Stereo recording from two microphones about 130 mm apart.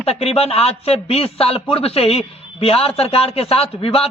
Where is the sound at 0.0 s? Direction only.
50° left (ahead or behind).